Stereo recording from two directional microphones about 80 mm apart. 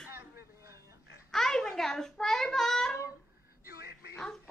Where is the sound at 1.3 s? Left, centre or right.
Centre.